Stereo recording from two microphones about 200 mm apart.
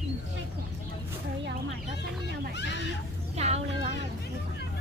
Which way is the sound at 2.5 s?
60° left (ahead or behind).